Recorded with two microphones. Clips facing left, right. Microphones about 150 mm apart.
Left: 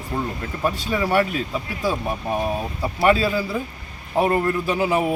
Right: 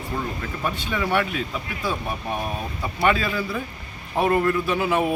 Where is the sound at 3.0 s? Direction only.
30° left (ahead or behind).